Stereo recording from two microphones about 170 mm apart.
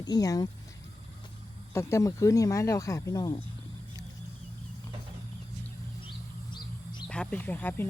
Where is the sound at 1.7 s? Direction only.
15° left (ahead or behind).